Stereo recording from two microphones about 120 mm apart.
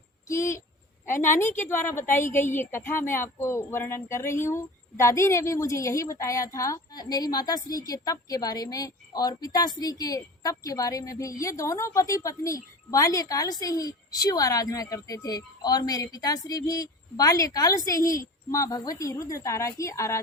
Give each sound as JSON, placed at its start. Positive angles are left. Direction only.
{"t": 0.3, "sound": "a woman's voice", "side_deg": 25}